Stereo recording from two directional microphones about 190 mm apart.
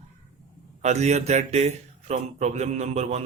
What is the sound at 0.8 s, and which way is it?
Speech, 35° right (ahead or behind).